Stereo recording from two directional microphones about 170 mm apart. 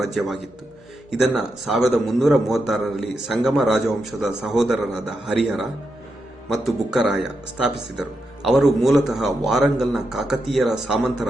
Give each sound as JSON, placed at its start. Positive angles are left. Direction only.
{"t": 0.0, "sound": "speech", "side_deg": 0}